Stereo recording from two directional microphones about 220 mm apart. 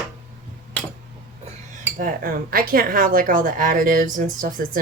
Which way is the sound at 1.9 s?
40° right (ahead or behind).